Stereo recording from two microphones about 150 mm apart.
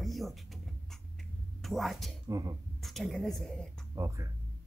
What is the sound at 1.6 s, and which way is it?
Speech, centre (ahead or behind).